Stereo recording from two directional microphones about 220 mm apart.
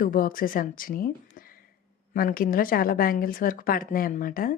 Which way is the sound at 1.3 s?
40° left (ahead or behind).